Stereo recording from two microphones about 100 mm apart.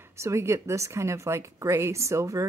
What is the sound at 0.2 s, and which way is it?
A woman's voice, 30° right (ahead or behind).